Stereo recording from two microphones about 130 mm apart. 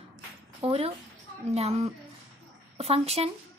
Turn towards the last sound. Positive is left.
turn(degrees=-50)  # may be behind; listen again after turning